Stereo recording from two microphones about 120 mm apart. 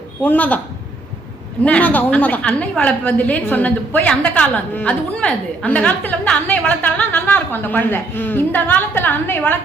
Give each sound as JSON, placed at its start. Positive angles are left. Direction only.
{"t": 0.2, "sound": "a woman's voice", "side_deg": 15}
{"t": 1.6, "sound": "a woman's voice", "side_deg": 10}